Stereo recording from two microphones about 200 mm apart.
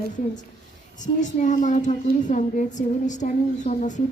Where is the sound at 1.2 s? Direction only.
40° left (ahead or behind).